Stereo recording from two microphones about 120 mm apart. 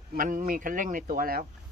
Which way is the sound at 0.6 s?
90° right.